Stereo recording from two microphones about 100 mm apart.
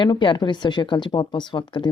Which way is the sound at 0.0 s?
55° left (ahead or behind).